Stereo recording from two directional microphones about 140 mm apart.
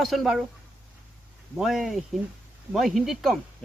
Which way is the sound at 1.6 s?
Centre (ahead or behind).